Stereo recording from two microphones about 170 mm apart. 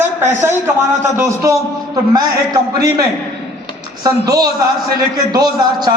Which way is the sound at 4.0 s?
20° right (ahead or behind).